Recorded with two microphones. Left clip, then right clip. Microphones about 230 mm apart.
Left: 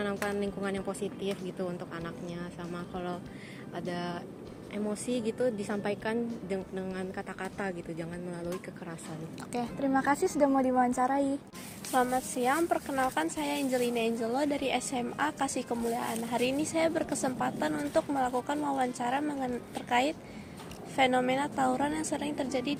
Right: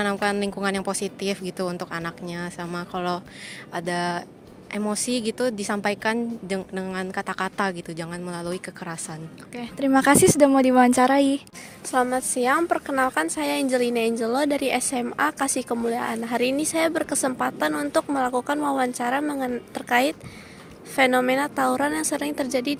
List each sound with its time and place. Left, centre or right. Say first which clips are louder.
0.0 s a woman's voice: right 9 dB; right
11.9 s a woman's voice: right 6 dB; right